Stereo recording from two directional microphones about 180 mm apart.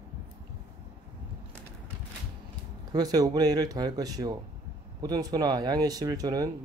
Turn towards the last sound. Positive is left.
turn(degrees=-20)  # may be behind; listen again after turning